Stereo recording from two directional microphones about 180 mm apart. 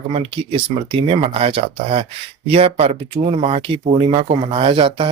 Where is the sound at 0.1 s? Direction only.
30° right (ahead or behind).